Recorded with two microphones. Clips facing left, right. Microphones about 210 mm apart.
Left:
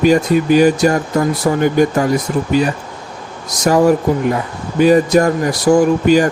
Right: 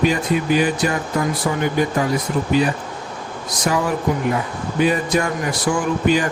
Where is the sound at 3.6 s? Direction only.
45° left (ahead or behind).